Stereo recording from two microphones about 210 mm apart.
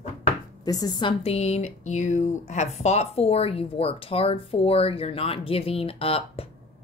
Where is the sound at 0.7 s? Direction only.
20° left (ahead or behind).